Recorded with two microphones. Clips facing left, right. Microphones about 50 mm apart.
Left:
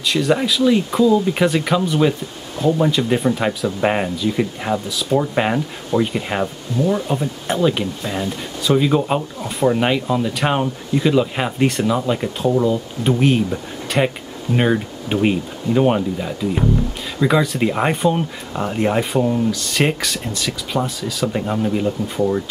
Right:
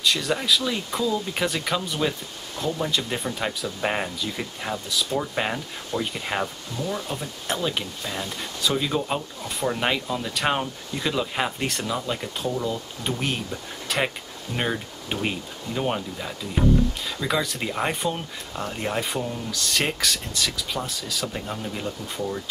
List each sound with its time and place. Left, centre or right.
0.0 s speech: centre
14.5 s speech: centre
19.5 s speech: centre
21.3 s speech: left